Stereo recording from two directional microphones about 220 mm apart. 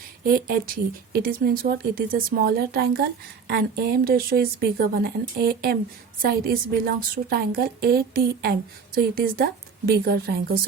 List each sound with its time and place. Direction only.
0.3 s speech: 45° right (ahead or behind)